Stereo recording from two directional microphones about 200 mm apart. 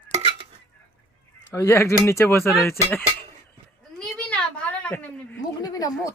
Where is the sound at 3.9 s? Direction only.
5° left (ahead or behind).